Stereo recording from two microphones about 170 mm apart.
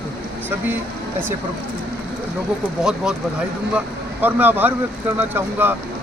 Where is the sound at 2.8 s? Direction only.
5° right (ahead or behind).